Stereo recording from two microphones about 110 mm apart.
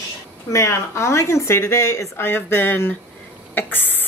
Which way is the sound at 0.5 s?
25° left (ahead or behind).